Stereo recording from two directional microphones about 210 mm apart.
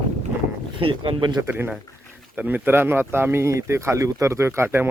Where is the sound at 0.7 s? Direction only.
25° right (ahead or behind).